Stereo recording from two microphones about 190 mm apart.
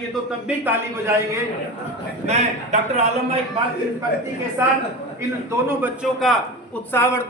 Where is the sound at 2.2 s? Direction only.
35° right (ahead or behind).